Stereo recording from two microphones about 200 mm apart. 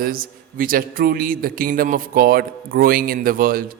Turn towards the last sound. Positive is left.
turn(degrees=-45)  # may be behind; listen again after turning